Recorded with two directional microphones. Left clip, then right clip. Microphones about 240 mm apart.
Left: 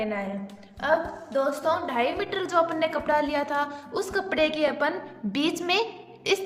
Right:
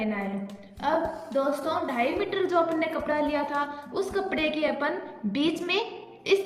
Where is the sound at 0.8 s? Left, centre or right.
Left.